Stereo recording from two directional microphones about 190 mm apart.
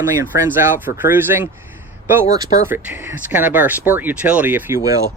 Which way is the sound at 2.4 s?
45° left (ahead or behind).